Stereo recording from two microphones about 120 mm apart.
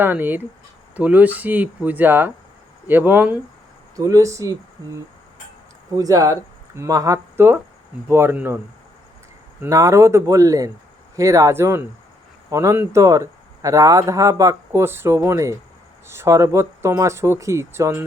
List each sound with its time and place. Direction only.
0.0 s speech: 15° right (ahead or behind)
3.9 s speech: 30° right (ahead or behind)
6.0 s speech: 30° right (ahead or behind)
9.6 s speech: 25° right (ahead or behind)